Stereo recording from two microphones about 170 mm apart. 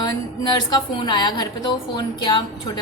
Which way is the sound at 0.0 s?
25° left (ahead or behind).